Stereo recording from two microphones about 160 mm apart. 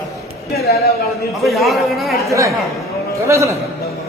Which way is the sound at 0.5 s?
75° left (ahead or behind).